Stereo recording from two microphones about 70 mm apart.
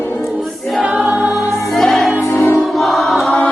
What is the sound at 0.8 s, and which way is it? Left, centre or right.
Choir, centre.